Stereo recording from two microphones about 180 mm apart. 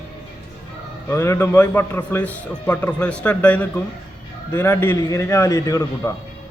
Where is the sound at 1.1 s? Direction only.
15° left (ahead or behind).